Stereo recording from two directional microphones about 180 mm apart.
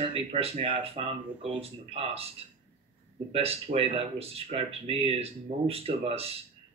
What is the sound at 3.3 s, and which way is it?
A man's voice, 30° right (ahead or behind).